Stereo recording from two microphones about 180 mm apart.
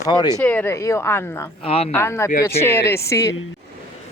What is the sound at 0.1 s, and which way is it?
Speech, 20° left (ahead or behind).